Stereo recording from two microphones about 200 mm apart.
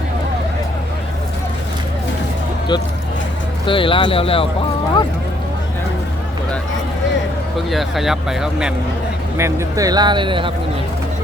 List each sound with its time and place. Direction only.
3.7 s speech: 25° left (ahead or behind)
7.7 s speech: centre (ahead or behind)
9.4 s speech: 15° right (ahead or behind)